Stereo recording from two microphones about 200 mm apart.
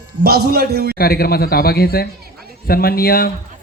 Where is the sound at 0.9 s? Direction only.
50° left (ahead or behind).